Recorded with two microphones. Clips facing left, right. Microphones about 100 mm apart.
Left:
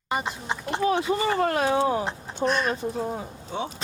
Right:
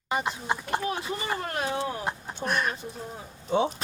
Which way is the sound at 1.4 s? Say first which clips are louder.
Left 8 dB; 90° left.